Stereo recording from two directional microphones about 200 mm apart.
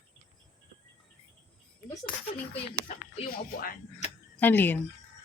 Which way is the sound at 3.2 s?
45° left (ahead or behind).